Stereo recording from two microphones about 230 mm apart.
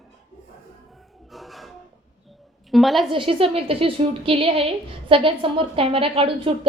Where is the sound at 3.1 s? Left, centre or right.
Right.